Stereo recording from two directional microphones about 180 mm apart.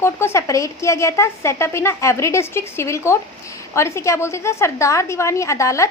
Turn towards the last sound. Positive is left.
turn(degrees=15)  # may be behind; listen again after turning